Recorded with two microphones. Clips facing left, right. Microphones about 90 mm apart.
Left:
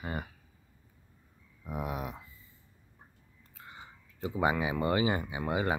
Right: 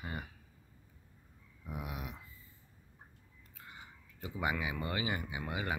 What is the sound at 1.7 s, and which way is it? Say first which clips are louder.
Speech: left 7 dB; 45° left (ahead or behind).